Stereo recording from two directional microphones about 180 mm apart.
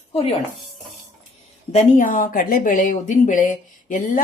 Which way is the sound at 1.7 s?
40° left (ahead or behind).